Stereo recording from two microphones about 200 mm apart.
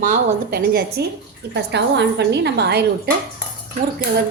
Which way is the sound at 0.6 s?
55° right (ahead or behind).